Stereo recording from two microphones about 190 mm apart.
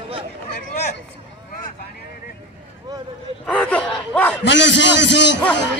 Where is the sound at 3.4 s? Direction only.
5° left (ahead or behind).